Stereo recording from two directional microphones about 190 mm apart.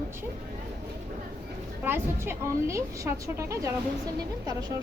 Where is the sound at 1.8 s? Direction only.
10° right (ahead or behind).